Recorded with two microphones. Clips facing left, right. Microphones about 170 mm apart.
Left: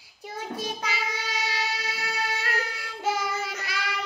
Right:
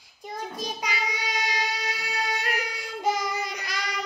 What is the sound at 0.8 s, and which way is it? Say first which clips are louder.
Child singing: right 1 dB; 15° right (ahead or behind).